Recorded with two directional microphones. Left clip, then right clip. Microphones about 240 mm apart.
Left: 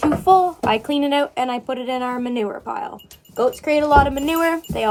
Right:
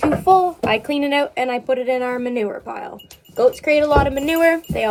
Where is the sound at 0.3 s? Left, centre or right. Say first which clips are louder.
Even; left.